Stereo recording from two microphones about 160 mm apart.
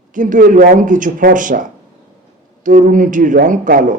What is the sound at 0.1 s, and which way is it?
Speech, 55° right (ahead or behind).